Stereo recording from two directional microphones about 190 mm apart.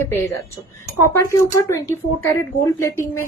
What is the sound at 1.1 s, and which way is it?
Speech, 15° left (ahead or behind).